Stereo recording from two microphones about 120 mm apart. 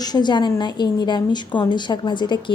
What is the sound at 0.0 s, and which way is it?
A woman's voice, 35° left (ahead or behind).